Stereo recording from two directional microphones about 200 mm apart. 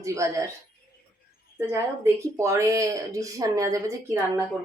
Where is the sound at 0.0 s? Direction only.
15° right (ahead or behind).